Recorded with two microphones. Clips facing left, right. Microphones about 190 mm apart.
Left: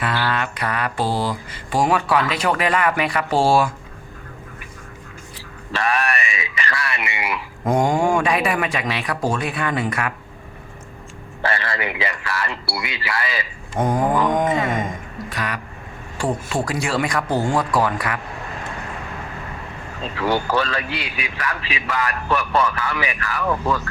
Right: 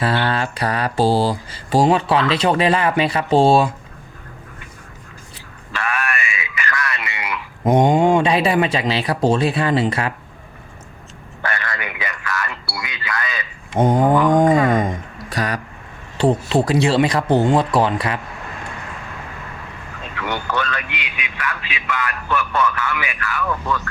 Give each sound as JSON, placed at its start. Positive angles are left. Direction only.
{"t": 0.0, "sound": "mantra", "side_deg": -30}
{"t": 5.7, "sound": "a sound", "side_deg": 35}
{"t": 7.6, "sound": "mantra", "side_deg": -20}
{"t": 11.4, "sound": "a sound", "side_deg": 30}
{"t": 13.7, "sound": "mantra", "side_deg": -25}
{"t": 14.3, "sound": "a sound", "side_deg": -35}
{"t": 15.3, "sound": "speech", "side_deg": -35}
{"t": 16.1, "sound": "mantra", "side_deg": -25}
{"t": 20.0, "sound": "a man's voice", "side_deg": 30}